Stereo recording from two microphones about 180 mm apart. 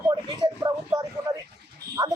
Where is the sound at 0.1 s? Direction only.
20° right (ahead or behind).